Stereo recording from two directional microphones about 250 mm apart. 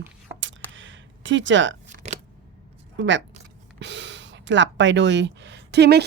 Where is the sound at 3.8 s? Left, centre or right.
Right.